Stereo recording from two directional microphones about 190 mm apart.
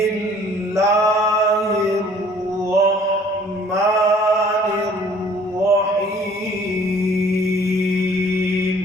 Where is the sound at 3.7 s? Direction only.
15° right (ahead or behind).